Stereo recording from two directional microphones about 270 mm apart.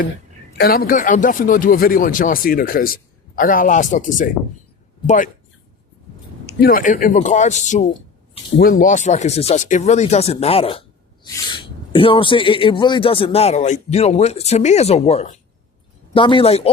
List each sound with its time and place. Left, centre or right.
0.6 s speech: left
6.4 s speech: left